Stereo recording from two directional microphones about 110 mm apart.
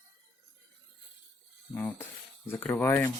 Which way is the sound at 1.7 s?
20° left (ahead or behind).